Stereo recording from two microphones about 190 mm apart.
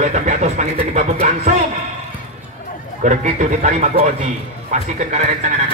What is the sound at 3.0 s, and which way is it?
Speech, 40° right (ahead or behind).